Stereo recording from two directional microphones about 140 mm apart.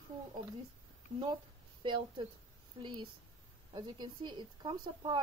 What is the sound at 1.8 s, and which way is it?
A woman's voice, 35° right (ahead or behind).